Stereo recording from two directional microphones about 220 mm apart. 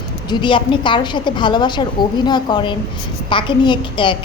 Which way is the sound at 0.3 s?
20° left (ahead or behind).